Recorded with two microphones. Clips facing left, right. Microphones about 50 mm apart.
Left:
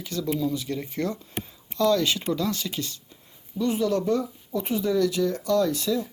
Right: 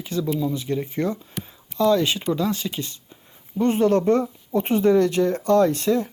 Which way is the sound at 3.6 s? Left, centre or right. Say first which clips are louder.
Right 6 dB; right.